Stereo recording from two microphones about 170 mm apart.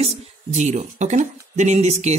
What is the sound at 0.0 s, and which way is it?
Speech, 40° right (ahead or behind).